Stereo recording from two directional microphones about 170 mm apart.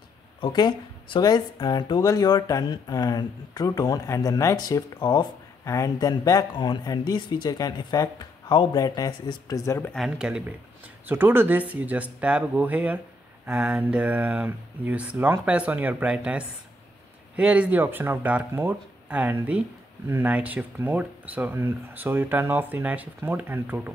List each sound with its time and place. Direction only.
0.4 s speech: 25° left (ahead or behind)
9.9 s speech: 5° right (ahead or behind)